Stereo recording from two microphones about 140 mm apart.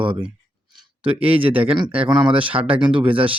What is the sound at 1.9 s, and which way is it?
Speech, 10° right (ahead or behind).